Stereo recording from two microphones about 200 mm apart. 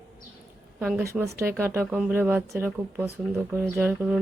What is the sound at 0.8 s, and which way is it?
Speech, 5° right (ahead or behind).